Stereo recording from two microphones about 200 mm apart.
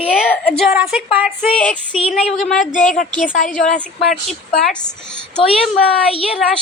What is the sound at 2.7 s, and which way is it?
Speech, 40° left (ahead or behind).